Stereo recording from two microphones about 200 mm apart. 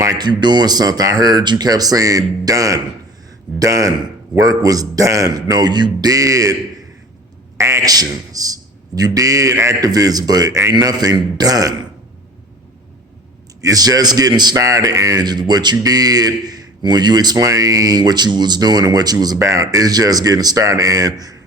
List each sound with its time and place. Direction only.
0.0 s a man's voice: 20° right (ahead or behind)
7.6 s a man's voice: 15° right (ahead or behind)
13.6 s a man's voice: 20° right (ahead or behind)